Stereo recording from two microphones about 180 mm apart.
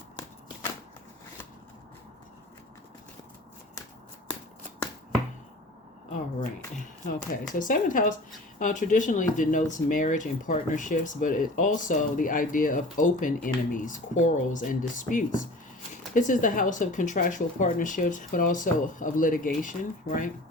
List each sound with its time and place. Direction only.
7.5 s speech: 45° left (ahead or behind)